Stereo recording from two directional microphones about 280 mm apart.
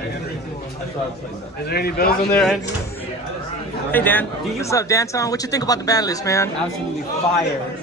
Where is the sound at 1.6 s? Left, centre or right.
Left.